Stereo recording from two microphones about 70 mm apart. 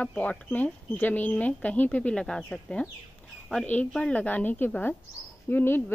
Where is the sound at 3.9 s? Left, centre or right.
Centre.